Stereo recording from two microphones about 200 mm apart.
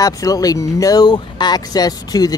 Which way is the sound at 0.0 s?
15° left (ahead or behind).